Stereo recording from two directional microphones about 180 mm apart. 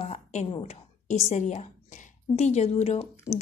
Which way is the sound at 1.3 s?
40° left (ahead or behind).